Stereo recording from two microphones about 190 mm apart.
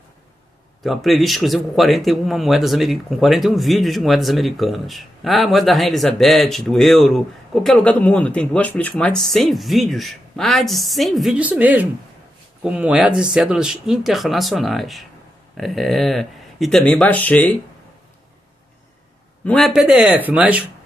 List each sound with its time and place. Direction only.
0.8 s speech: centre (ahead or behind)
19.4 s speech: 5° left (ahead or behind)